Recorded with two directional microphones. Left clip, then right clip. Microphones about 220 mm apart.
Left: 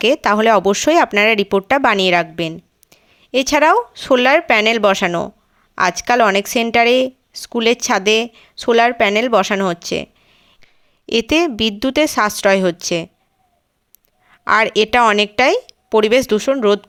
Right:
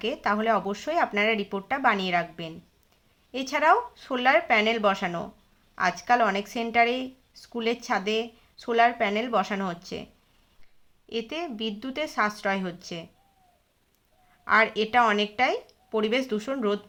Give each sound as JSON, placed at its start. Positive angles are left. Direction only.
{"t": 0.0, "sound": "a woman's voice", "side_deg": 45}
{"t": 14.3, "sound": "speech", "side_deg": 50}